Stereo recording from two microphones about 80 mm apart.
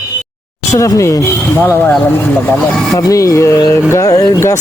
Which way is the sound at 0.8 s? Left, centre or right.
Left.